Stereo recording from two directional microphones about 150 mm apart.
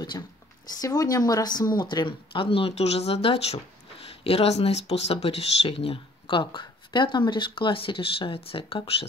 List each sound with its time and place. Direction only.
0.7 s speech: 25° left (ahead or behind)